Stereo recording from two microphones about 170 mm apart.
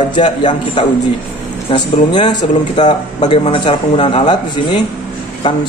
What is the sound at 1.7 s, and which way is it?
Speech, 35° left (ahead or behind).